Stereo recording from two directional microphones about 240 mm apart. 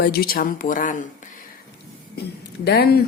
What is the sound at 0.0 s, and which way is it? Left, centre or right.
A woman's voice, left.